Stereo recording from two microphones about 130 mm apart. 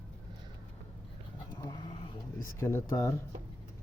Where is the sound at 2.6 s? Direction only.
20° left (ahead or behind).